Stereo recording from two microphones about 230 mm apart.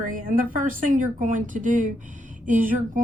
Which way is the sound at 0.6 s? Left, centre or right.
Right.